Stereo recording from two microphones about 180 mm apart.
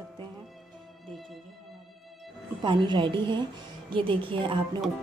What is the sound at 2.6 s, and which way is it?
Speech, 25° right (ahead or behind).